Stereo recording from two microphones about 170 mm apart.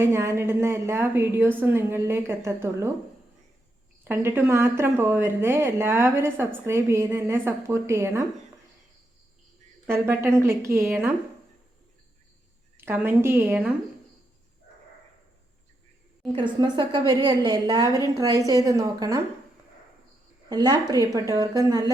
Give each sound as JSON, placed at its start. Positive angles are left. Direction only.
{"t": 0.0, "sound": "speech", "side_deg": -15}
{"t": 4.1, "sound": "speech", "side_deg": -15}
{"t": 9.8, "sound": "speech", "side_deg": -15}
{"t": 12.7, "sound": "speech", "side_deg": -10}
{"t": 16.3, "sound": "a woman's voice", "side_deg": -25}
{"t": 20.5, "sound": "a woman's voice", "side_deg": -20}